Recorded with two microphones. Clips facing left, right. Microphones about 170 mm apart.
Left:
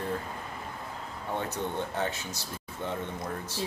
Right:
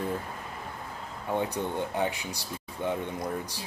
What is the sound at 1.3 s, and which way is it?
Speech, 15° right (ahead or behind).